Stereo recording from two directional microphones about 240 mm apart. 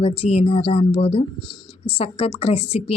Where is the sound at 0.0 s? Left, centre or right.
Left.